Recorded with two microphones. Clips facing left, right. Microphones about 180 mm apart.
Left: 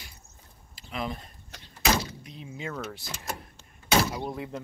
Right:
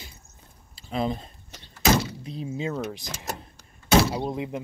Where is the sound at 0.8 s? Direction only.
30° right (ahead or behind).